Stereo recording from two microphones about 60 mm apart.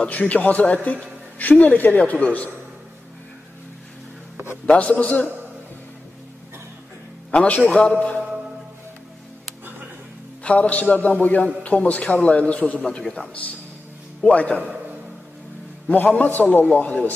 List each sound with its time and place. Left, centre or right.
0.0 s a man's voice: left
4.6 s a man's voice: left
7.2 s a man's voice: left
10.4 s a man's voice: left
12.8 s a man's voice: centre
14.6 s a sound: right
15.9 s a man's voice: left